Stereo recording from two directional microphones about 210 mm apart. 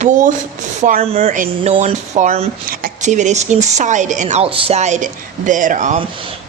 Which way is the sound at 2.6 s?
40° right (ahead or behind).